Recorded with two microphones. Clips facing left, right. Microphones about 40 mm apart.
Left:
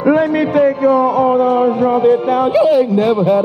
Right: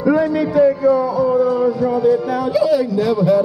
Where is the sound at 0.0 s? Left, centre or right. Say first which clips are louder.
Left 3 dB; left.